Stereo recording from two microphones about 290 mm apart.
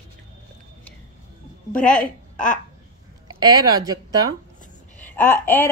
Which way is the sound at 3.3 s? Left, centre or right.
Centre.